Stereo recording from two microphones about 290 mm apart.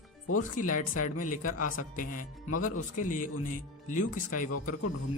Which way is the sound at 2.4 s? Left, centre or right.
Left.